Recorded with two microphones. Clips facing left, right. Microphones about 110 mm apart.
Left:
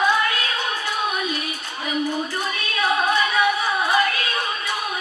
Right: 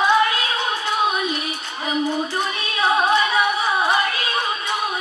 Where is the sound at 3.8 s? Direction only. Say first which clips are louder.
Even; 25° right (ahead or behind).